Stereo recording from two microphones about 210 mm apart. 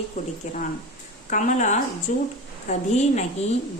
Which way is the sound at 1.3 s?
35° left (ahead or behind).